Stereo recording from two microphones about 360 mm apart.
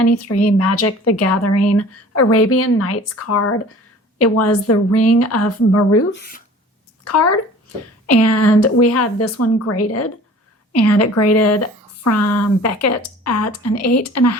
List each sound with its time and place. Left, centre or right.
0.3 s speech: centre
0.6 s a woman's voice: left
7.0 s a woman's voice: left